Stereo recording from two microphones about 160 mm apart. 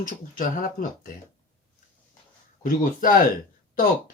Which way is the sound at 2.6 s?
60° left (ahead or behind).